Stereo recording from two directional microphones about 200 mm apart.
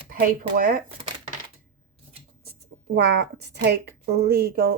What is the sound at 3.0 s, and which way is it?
Speech, 55° right (ahead or behind).